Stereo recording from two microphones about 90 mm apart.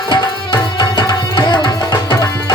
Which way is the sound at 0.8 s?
55° left (ahead or behind).